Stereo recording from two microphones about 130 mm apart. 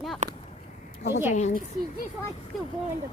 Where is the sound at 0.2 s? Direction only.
65° right (ahead or behind).